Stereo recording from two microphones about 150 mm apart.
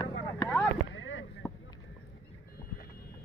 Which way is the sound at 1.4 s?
Centre (ahead or behind).